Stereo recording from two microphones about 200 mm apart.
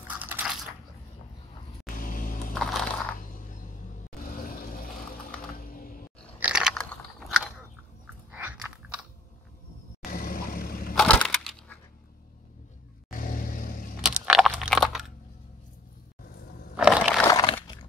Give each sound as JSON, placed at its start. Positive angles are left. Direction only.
{"t": 0.1, "sound": "crushing", "side_deg": -10}
{"t": 1.9, "sound": "music", "side_deg": 45}
{"t": 2.5, "sound": "crushing", "side_deg": 0}
{"t": 3.2, "sound": "a sound", "side_deg": 45}
{"t": 6.4, "sound": "biting", "side_deg": -5}
{"t": 10.1, "sound": "vehicle", "side_deg": 45}
{"t": 11.2, "sound": "crushing", "side_deg": 0}
{"t": 13.2, "sound": "vehicle", "side_deg": 45}
{"t": 14.0, "sound": "a sound", "side_deg": -5}
{"t": 16.7, "sound": "crushing", "side_deg": -5}
{"t": 17.3, "sound": "a sound", "side_deg": 20}